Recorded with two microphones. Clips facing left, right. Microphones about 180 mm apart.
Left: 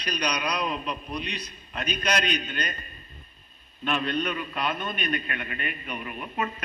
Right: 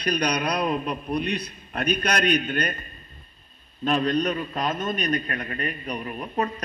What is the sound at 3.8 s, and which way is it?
A man's voice, 40° right (ahead or behind).